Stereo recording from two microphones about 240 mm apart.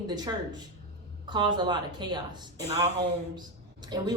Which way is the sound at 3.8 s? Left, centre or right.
Centre.